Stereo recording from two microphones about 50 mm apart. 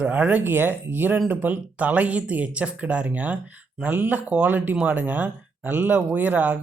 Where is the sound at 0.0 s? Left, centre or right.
Right.